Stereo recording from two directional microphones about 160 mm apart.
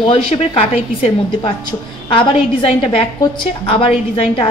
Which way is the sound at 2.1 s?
35° left (ahead or behind).